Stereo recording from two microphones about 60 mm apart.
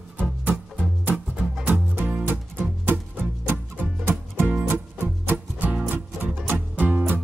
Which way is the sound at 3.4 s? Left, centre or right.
Right.